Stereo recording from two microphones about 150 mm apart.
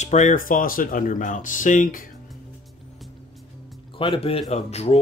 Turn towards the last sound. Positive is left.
turn(degrees=45)  # may be behind; listen again after turning